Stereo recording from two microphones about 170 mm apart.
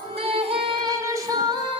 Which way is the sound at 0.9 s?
20° right (ahead or behind).